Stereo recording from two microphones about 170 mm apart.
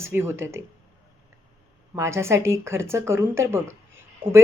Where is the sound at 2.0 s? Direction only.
15° right (ahead or behind).